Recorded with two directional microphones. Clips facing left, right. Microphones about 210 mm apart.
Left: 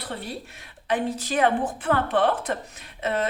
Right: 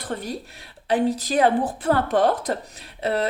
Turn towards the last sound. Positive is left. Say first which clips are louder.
# right 2 dB
turn(degrees=-35)  # may be behind; listen again after turning